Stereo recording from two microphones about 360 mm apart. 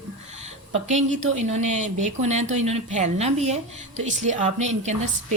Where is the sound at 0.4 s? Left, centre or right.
Centre.